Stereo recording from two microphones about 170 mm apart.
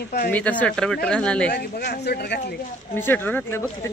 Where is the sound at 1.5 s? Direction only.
70° left (ahead or behind).